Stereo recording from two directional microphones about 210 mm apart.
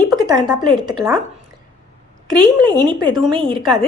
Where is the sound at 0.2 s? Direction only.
15° right (ahead or behind).